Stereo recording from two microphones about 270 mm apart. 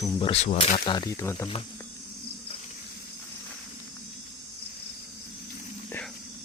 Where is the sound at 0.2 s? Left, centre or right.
Left.